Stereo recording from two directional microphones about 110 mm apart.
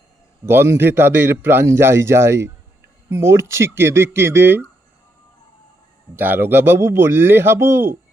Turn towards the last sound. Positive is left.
turn(degrees=-20)  # may be behind; listen again after turning